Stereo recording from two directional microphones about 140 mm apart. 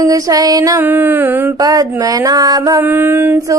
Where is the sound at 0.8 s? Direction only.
15° right (ahead or behind).